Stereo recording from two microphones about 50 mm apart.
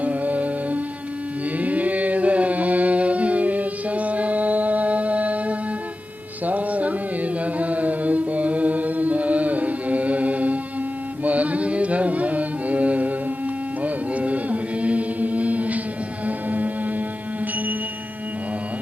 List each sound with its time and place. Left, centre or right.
0.0 s music: right
11.2 s carnatic music: right
13.8 s chant: right
16.2 s music: right